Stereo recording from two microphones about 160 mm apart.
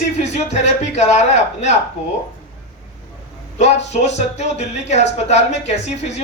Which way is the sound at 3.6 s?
45° left (ahead or behind).